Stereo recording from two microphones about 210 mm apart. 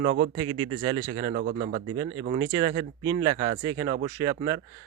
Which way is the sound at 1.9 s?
15° right (ahead or behind).